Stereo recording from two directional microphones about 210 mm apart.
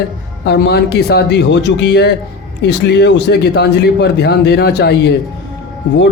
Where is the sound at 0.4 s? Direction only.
50° left (ahead or behind).